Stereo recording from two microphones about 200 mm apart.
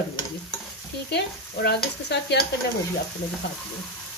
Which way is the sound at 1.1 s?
55° left (ahead or behind).